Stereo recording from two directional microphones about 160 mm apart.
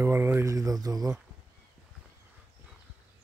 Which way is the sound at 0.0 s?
15° right (ahead or behind).